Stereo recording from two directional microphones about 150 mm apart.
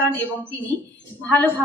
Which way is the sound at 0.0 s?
10° left (ahead or behind).